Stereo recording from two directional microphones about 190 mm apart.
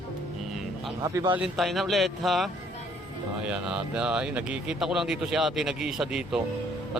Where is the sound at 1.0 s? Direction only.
20° right (ahead or behind).